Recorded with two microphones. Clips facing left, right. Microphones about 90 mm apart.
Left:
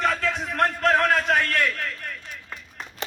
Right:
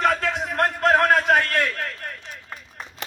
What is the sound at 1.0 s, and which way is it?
Speech, 45° right (ahead or behind).